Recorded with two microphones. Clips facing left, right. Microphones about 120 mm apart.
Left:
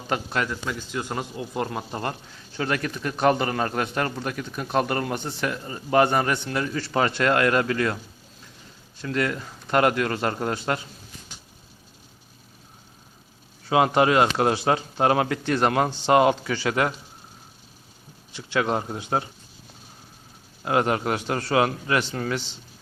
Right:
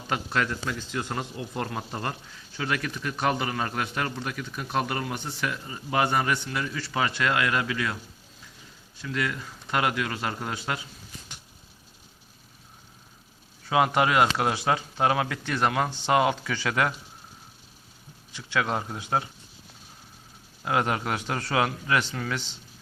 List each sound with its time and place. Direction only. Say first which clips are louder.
0.8 s speech: left 2 dB; 15° left (ahead or behind)
2.6 s a man's voice: left 3 dB; 40° left (ahead or behind)
6.1 s a man's voice: left 3 dB; 30° left (ahead or behind)
9.0 s a man's voice: left 4 dB; 45° left (ahead or behind)
13.7 s speech: left 3 dB; 25° left (ahead or behind)
18.5 s speech: left 3 dB; 20° left (ahead or behind)
20.7 s a man's voice: left 4 dB; 25° left (ahead or behind)